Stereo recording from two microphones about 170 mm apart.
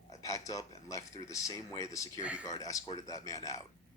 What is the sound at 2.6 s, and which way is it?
A man's voice, 20° left (ahead or behind).